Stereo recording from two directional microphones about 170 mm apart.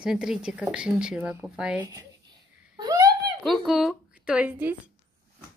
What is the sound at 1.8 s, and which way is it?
Speech, 20° right (ahead or behind).